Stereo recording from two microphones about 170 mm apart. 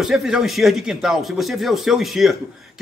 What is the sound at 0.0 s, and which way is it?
A man's voice, centre (ahead or behind).